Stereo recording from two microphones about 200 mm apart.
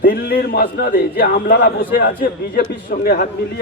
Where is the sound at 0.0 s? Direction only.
50° left (ahead or behind).